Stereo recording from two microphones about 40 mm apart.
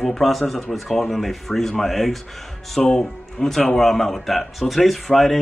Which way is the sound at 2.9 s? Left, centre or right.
Centre.